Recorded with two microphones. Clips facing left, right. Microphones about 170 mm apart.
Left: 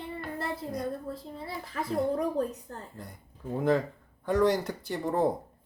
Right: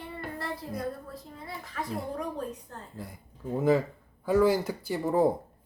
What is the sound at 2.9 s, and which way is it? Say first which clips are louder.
Speech: right 3 dB; 5° right (ahead or behind).